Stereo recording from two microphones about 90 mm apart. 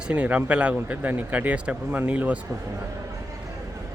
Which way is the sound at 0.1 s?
15° right (ahead or behind).